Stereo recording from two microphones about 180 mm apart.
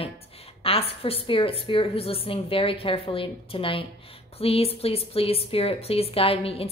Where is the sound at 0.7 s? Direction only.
30° left (ahead or behind).